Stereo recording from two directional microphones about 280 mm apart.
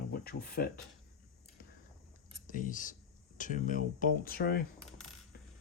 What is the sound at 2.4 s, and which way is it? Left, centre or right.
Speech, left.